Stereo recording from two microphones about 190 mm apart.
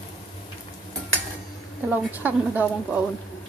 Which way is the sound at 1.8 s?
10° right (ahead or behind).